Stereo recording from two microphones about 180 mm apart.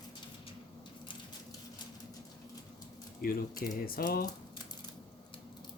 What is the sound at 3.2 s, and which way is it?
Speech, 55° left (ahead or behind).